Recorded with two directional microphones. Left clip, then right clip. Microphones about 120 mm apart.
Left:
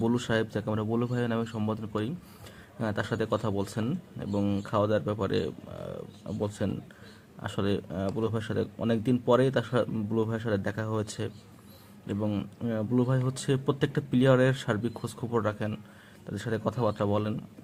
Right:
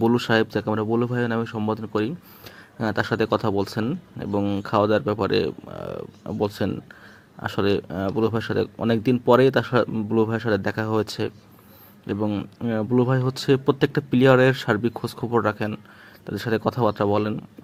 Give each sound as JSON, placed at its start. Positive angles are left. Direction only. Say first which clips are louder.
{"t": 0.0, "sound": "speech", "louder": "right 8 dB", "side_deg": -30}
{"t": 4.6, "sound": "speech", "louder": "right 8 dB", "side_deg": -30}
{"t": 12.7, "sound": "speech", "louder": "right 7 dB", "side_deg": -30}